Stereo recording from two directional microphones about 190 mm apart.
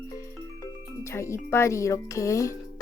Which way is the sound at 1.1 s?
15° left (ahead or behind).